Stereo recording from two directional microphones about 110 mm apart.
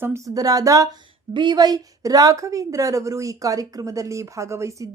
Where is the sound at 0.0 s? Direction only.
25° right (ahead or behind).